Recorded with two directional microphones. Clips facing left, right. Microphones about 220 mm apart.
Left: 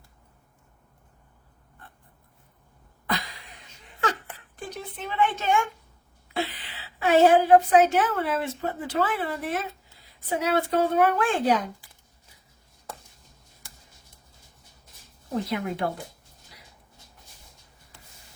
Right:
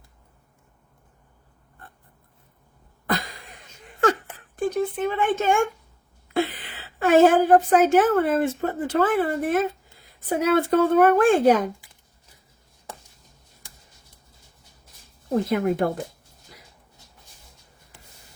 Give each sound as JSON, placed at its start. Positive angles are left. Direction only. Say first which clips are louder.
{"t": 3.1, "sound": "a sound", "louder": "right 4 dB", "side_deg": -50}
{"t": 4.5, "sound": "a woman's voice", "louder": "right 14 dB", "side_deg": -50}
{"t": 15.4, "sound": "speech", "louder": "right 8 dB", "side_deg": -50}